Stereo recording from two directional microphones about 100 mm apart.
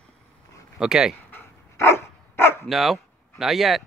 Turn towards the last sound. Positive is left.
turn(degrees=0)  # may be behind; listen again after turning